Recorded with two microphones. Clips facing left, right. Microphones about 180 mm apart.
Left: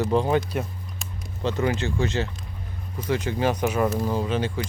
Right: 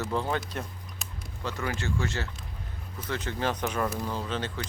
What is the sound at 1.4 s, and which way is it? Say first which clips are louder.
Speech: left 8 dB; 20° left (ahead or behind).